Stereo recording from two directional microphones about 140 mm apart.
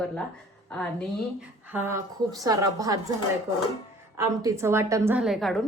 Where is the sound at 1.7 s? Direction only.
20° right (ahead or behind).